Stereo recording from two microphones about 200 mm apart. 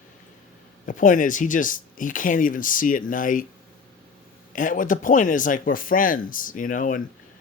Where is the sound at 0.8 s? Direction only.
40° left (ahead or behind).